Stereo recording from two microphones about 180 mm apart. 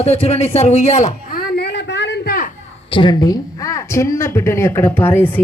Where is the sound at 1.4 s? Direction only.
65° left (ahead or behind).